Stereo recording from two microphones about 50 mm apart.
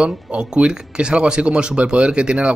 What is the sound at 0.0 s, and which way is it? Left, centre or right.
Speech, right.